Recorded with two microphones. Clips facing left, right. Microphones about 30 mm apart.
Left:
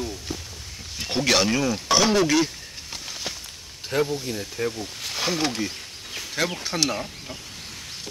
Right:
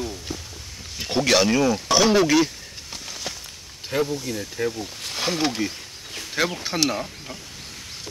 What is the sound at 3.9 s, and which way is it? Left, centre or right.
Speech, centre.